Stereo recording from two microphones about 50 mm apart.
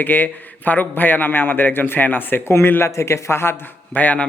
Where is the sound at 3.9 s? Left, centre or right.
Left.